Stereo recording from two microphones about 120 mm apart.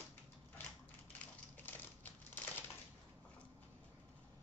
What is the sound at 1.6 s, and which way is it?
Typing, 15° left (ahead or behind).